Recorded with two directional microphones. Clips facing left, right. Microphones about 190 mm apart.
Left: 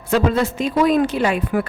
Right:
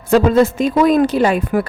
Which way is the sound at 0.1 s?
45° right (ahead or behind).